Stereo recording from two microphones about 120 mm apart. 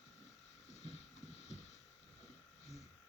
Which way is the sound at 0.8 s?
60° left (ahead or behind).